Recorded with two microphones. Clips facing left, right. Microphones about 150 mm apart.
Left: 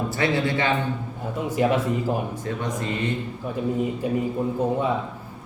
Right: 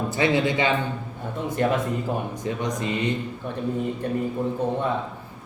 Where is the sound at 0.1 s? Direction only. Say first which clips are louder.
Right 4 dB; 15° right (ahead or behind).